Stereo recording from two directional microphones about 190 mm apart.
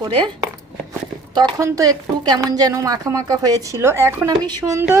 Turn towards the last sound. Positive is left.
turn(degrees=-15)  # may be behind; listen again after turning